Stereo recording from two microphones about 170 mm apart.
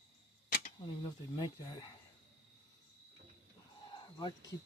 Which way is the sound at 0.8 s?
25° left (ahead or behind).